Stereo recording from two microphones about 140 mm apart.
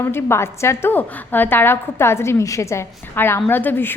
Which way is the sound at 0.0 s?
15° left (ahead or behind).